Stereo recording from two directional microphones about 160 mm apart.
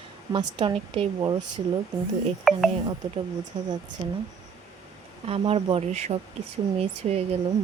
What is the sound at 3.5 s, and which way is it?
Speech, 40° right (ahead or behind).